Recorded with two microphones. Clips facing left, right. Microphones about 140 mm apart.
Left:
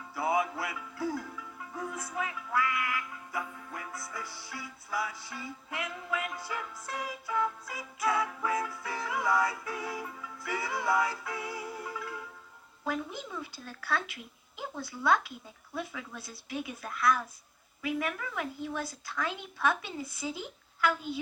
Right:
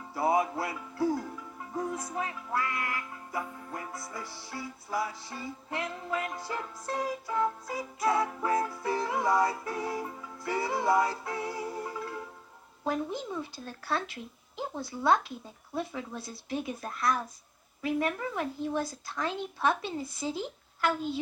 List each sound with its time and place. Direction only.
0.1 s music: 35° right (ahead or behind)
13.3 s speech: 25° right (ahead or behind)